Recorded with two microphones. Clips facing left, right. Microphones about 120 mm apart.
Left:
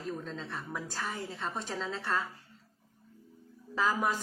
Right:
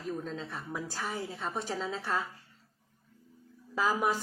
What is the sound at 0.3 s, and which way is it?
A woman's voice, 5° right (ahead or behind).